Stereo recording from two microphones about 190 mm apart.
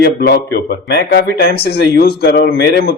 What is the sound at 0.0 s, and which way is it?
Speech, 55° left (ahead or behind).